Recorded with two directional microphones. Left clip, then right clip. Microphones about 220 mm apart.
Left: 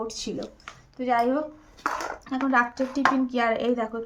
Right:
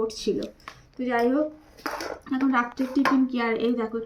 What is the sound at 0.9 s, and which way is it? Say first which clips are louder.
A woman's voice: even; 20° left (ahead or behind).